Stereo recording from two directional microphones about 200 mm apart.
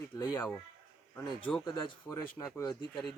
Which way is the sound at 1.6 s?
25° left (ahead or behind).